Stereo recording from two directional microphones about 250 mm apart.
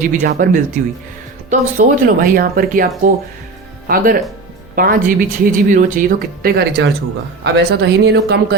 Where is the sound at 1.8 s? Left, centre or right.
Right.